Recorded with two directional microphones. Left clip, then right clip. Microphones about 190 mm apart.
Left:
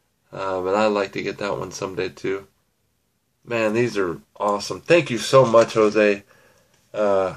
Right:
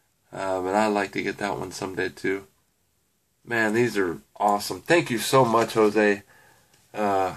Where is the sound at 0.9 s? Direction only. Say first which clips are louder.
Left 3 dB; 15° right (ahead or behind).